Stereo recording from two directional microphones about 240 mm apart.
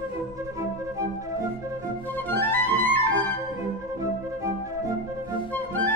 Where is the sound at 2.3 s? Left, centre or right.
Centre.